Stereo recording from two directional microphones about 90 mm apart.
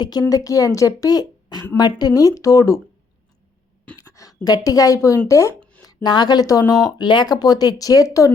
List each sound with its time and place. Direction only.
0.0 s a woman's voice: 45° left (ahead or behind)
3.9 s a sound: 40° left (ahead or behind)
4.4 s a woman's voice: 45° left (ahead or behind)
5.8 s speech: 50° left (ahead or behind)